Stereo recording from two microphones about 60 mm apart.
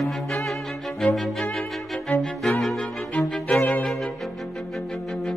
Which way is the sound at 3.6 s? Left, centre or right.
Left.